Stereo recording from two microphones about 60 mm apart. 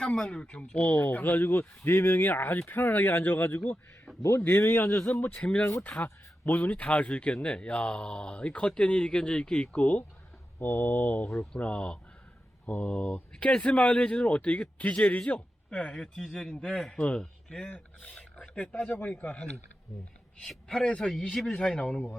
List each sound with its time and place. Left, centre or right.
0.0 s speech: centre
0.9 s speech: left
1.8 s speech: left
4.7 s speech: left
6.0 s speech: left
10.6 s speech: left; by 16.5 s centre
16.5 s speech: centre
16.7 s speech: centre
17.0 s speech: centre
20.4 s speech: centre